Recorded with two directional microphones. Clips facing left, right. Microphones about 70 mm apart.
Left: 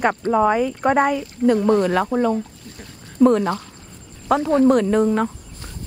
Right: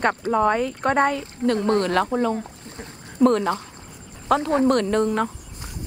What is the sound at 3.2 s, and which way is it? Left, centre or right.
Speech, centre.